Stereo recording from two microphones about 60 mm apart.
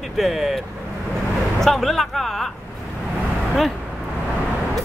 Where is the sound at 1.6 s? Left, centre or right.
Centre.